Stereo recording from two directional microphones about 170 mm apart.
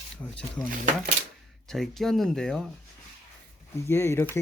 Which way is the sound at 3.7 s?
15° left (ahead or behind).